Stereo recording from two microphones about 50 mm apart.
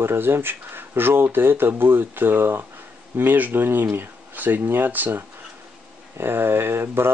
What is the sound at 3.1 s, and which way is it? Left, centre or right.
Speech, right.